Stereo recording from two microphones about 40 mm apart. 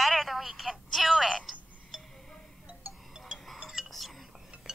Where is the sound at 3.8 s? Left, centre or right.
Centre.